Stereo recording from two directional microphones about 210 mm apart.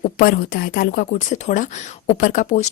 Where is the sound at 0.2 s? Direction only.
45° left (ahead or behind).